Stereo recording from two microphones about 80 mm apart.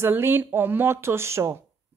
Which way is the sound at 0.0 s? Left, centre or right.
Right.